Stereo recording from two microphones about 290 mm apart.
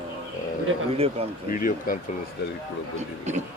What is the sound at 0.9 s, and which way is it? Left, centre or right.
Speech, centre.